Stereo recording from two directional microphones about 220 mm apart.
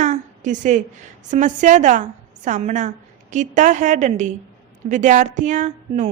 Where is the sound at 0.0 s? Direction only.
35° right (ahead or behind).